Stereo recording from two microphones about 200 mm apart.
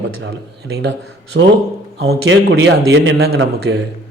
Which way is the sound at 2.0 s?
60° right (ahead or behind).